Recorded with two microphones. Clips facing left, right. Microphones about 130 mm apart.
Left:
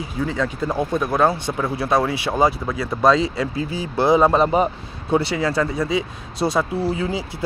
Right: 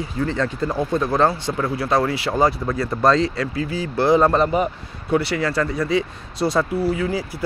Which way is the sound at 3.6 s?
20° left (ahead or behind).